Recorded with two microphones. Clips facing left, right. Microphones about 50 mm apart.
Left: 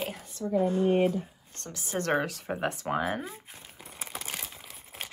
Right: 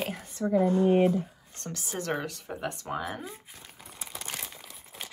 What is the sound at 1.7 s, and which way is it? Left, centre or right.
Speech, centre.